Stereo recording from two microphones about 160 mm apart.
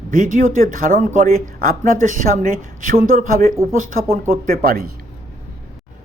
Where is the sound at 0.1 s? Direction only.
55° right (ahead or behind).